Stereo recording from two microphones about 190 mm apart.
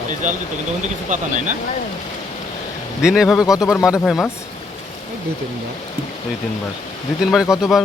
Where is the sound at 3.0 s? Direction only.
5° right (ahead or behind).